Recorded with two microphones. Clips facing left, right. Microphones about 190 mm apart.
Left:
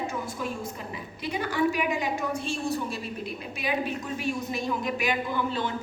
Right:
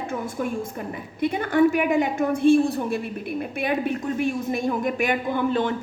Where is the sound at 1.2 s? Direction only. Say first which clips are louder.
Right 8 dB; 55° right (ahead or behind).